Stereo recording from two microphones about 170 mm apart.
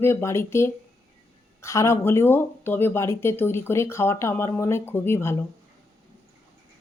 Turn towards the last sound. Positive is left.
turn(degrees=15)  # may be behind; listen again after turning